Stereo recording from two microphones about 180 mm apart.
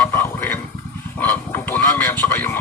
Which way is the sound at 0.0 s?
15° left (ahead or behind).